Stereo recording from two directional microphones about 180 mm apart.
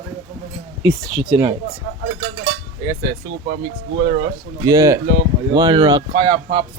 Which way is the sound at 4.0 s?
30° right (ahead or behind).